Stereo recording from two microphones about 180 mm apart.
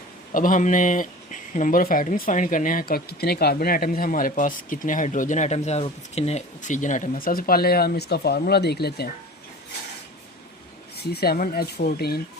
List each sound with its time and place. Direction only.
0.3 s speech: 45° left (ahead or behind); by 9.0 s 65° left (ahead or behind)
11.1 s speech: 60° left (ahead or behind)